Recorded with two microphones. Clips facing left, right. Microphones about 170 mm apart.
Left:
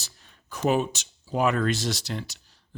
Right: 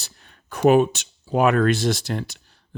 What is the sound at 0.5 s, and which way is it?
Speech, 60° right (ahead or behind).